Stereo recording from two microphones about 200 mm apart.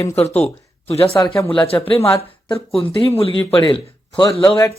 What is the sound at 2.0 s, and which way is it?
Speech, 15° left (ahead or behind).